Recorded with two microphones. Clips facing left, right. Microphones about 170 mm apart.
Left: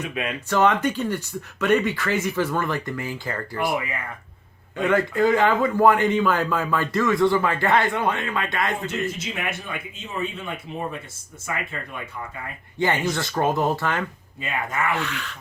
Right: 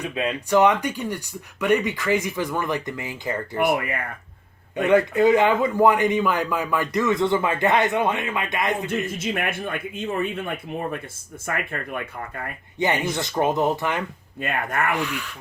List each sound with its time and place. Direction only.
0.0 s a man's voice: 30° right (ahead or behind)
0.5 s speech: 15° right (ahead or behind)
4.8 s a man's voice: 20° right (ahead or behind)
9.1 s speech: 55° right (ahead or behind)
12.8 s a man's voice: 20° right (ahead or behind)
14.4 s speech: 55° right (ahead or behind)
14.9 s speech: 10° right (ahead or behind)